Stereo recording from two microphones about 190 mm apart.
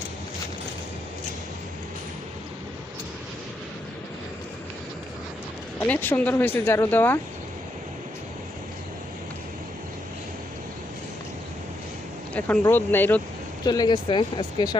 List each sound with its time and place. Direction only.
5.8 s speech: 10° left (ahead or behind)
12.3 s speech: 10° left (ahead or behind)
13.7 s speech: 20° left (ahead or behind)